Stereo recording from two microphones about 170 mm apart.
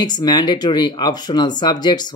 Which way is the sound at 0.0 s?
25° left (ahead or behind).